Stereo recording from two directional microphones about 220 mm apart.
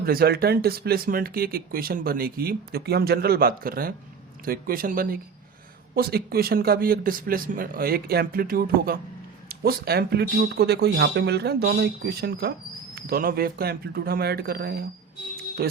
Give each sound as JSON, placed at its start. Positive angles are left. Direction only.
{"t": 0.0, "sound": "a man's voice", "side_deg": -40}